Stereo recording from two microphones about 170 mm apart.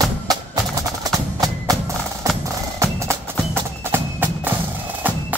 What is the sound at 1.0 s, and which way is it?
Music, 20° right (ahead or behind).